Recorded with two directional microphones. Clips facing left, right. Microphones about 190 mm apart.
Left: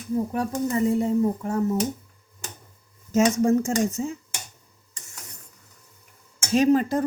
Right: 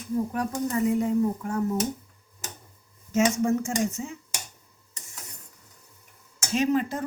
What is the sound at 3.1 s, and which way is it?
Speech, 40° left (ahead or behind).